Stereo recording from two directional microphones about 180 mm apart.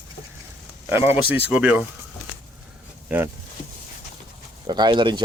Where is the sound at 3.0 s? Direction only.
10° right (ahead or behind).